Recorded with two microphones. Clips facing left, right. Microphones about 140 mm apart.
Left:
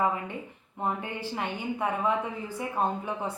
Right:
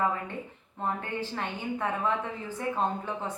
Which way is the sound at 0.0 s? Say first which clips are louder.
Left 1 dB; 15° left (ahead or behind).